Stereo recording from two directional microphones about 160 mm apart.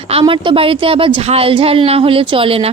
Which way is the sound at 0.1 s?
35° right (ahead or behind).